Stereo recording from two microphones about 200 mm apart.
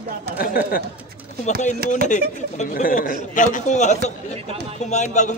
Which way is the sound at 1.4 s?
35° left (ahead or behind).